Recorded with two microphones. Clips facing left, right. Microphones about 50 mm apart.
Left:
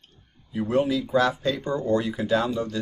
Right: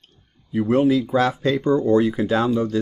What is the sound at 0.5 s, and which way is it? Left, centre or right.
Speech, right.